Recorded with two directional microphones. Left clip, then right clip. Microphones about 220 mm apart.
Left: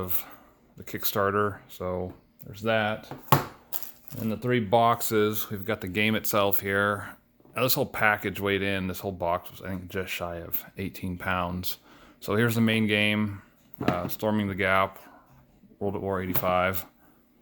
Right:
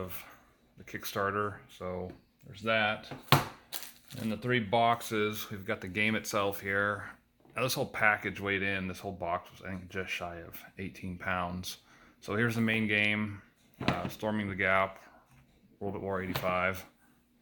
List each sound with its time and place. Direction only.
0.0 s speech: 50° left (ahead or behind)
4.2 s speech: 50° left (ahead or behind)